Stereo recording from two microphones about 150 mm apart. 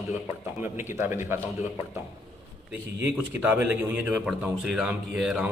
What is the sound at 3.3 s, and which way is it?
A man's voice, 10° right (ahead or behind).